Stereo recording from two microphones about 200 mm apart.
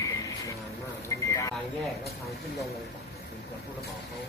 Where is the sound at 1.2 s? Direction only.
15° left (ahead or behind).